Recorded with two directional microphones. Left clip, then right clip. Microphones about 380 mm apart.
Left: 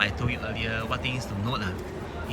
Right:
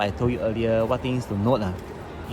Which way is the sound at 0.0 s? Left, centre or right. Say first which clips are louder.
Right 3 dB; centre.